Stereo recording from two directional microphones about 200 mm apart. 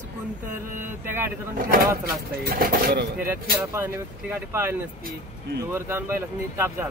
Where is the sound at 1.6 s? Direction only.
45° right (ahead or behind).